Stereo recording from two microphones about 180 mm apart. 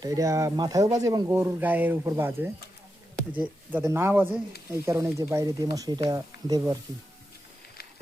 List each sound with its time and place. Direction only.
0.0 s speech: 20° right (ahead or behind)